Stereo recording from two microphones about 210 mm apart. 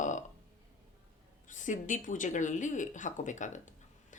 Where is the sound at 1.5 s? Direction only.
35° left (ahead or behind).